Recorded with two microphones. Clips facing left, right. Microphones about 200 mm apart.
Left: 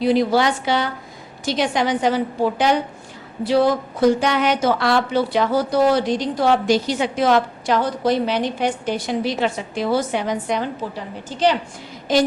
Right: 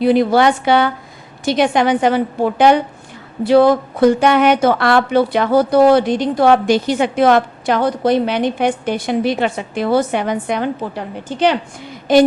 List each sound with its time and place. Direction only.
0.0 s a woman's voice: 55° right (ahead or behind)